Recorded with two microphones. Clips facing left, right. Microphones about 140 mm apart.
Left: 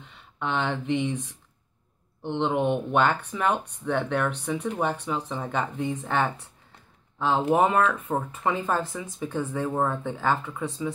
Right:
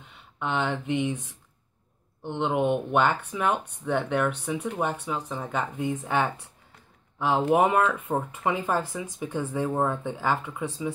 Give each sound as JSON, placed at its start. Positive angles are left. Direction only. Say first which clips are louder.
{"t": 0.4, "sound": "speech", "louder": "even", "side_deg": -5}
{"t": 2.2, "sound": "speech", "louder": "even", "side_deg": -5}